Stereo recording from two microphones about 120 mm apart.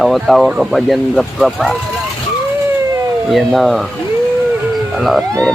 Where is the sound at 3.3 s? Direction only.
Centre (ahead or behind).